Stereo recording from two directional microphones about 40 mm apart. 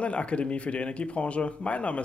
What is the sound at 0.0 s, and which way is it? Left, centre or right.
Speech, left.